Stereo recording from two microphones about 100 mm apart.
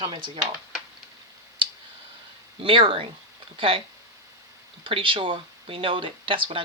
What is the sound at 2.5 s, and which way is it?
Speech, 60° right (ahead or behind).